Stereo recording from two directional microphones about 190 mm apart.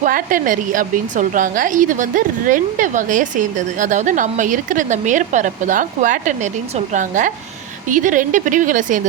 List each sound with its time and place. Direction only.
0.0 s a woman's voice: 45° right (ahead or behind)